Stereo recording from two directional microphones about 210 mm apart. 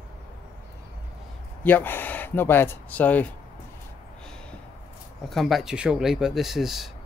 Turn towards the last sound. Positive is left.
turn(degrees=0)  # may be behind; listen again after turning